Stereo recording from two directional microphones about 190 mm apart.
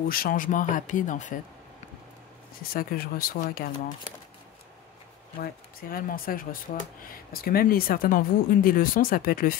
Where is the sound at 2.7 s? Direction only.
50° left (ahead or behind).